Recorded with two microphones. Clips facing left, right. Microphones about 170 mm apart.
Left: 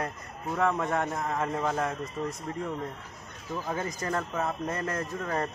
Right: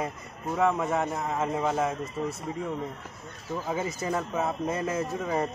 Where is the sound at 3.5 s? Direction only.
10° right (ahead or behind).